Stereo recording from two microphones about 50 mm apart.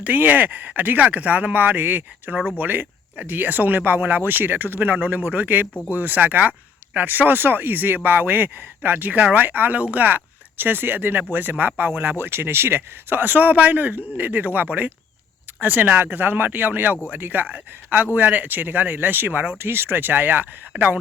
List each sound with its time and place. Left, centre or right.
0.0 s speech: right